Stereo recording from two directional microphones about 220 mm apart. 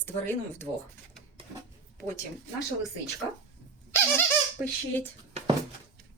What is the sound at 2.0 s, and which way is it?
Speech, 15° left (ahead or behind).